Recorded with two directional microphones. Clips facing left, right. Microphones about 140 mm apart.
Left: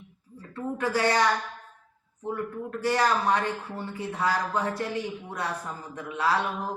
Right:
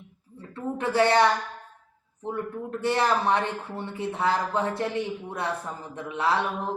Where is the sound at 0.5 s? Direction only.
25° right (ahead or behind).